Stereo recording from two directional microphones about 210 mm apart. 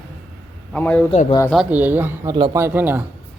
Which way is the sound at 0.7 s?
5° left (ahead or behind).